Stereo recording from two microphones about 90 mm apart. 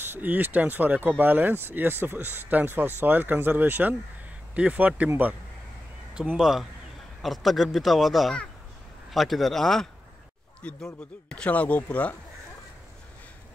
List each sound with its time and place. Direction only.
0.0 s speech: 20° right (ahead or behind)
6.3 s a man's voice: 5° right (ahead or behind)
10.6 s speech: 15° left (ahead or behind)